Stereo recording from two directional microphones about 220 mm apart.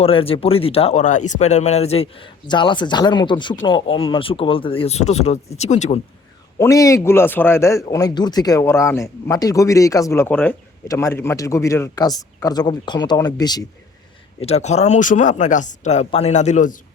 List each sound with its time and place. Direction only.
0.0 s speech: 25° left (ahead or behind)
6.6 s speech: 15° left (ahead or behind)
14.4 s speech: 30° left (ahead or behind)